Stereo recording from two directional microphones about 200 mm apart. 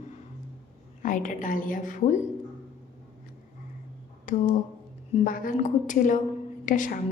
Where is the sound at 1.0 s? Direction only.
40° left (ahead or behind).